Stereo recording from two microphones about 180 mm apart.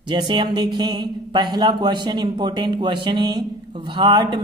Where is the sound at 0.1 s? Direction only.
25° right (ahead or behind).